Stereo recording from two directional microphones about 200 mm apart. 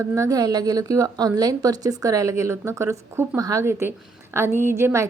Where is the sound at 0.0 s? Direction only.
15° right (ahead or behind).